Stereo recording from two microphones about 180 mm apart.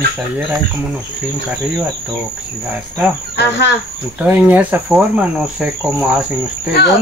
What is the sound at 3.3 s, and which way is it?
Speech, 70° left (ahead or behind).